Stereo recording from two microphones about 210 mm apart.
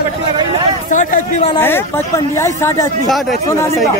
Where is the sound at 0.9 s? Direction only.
35° left (ahead or behind).